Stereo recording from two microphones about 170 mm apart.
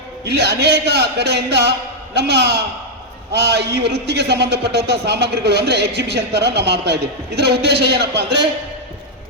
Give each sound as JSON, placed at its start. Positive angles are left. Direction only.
{"t": 0.3, "sound": "a man's voice", "side_deg": -75}